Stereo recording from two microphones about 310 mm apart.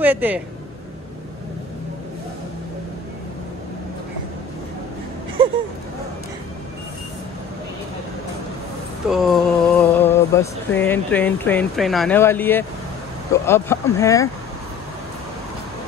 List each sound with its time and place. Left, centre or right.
0.0 s speech: centre
9.1 s speech: centre